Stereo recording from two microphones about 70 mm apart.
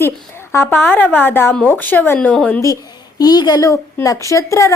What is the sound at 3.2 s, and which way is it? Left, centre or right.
Speech, left.